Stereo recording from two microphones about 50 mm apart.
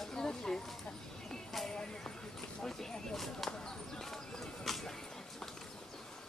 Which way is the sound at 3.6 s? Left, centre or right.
Centre.